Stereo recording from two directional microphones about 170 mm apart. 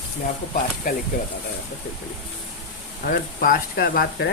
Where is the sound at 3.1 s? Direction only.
55° left (ahead or behind).